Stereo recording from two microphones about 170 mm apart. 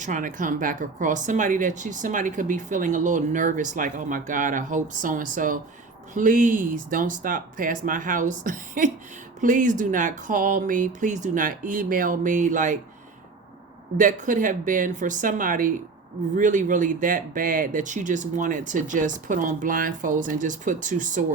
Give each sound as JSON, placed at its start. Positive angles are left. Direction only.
{"t": 0.0, "sound": "speech", "side_deg": -50}
{"t": 13.9, "sound": "speech", "side_deg": -50}